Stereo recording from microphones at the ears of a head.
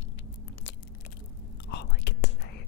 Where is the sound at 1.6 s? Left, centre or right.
Left.